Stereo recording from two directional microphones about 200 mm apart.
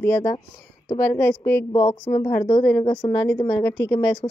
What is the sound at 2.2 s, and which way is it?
A woman's voice, 25° left (ahead or behind).